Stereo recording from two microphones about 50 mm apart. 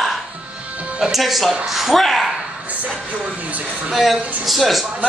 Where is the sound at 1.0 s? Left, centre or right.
Centre.